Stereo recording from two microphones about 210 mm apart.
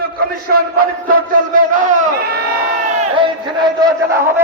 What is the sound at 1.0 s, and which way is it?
A man's voice, 40° right (ahead or behind).